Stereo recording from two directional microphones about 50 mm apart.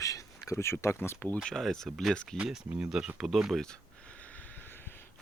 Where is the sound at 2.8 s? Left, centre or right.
Centre.